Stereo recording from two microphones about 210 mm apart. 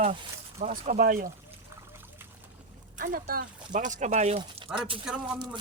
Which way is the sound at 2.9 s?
40° right (ahead or behind).